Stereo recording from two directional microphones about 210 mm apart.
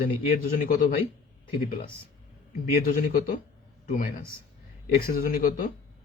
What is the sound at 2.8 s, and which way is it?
Speech, 40° left (ahead or behind).